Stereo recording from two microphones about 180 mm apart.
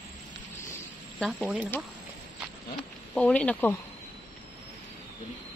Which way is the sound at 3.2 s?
5° left (ahead or behind).